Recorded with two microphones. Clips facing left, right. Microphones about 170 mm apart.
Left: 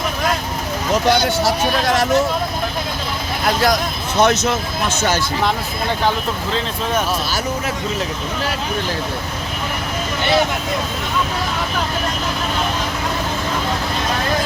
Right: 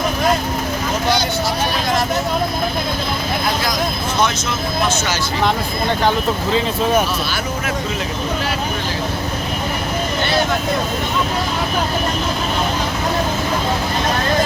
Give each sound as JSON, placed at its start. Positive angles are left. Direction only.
{"t": 1.1, "sound": "speech", "side_deg": 75}
{"t": 4.2, "sound": "speech", "side_deg": 60}